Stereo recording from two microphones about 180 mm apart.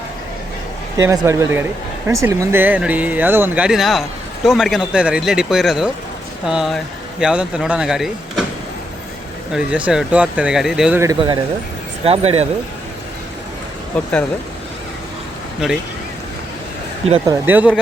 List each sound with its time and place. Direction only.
0.9 s speech: 20° right (ahead or behind); by 8.4 s centre (ahead or behind)
9.5 s speech: 5° right (ahead or behind)
12.0 s speech: 35° right (ahead or behind)
13.9 s speech: 5° left (ahead or behind)
17.2 s speech: 10° right (ahead or behind)